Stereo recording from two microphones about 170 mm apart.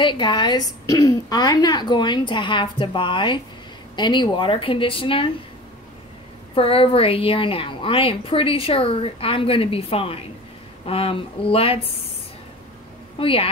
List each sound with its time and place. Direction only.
0.0 s a woman's voice: 30° left (ahead or behind)
6.5 s a woman's voice: 35° left (ahead or behind)
13.2 s a woman's voice: 30° left (ahead or behind)